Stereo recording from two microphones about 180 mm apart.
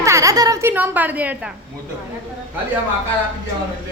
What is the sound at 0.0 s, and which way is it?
Speech, 15° right (ahead or behind).